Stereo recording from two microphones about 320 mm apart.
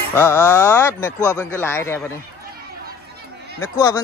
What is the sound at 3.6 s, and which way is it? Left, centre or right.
Speech, centre.